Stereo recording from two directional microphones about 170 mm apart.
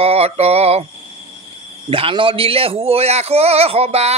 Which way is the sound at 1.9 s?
30° right (ahead or behind).